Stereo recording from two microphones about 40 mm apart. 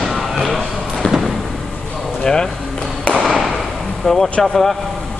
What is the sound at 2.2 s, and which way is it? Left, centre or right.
Chop, centre.